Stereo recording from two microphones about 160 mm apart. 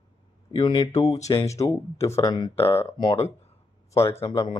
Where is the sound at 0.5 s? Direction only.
30° left (ahead or behind).